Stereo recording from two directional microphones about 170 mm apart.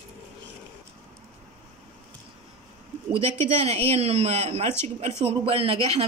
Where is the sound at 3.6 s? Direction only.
35° right (ahead or behind).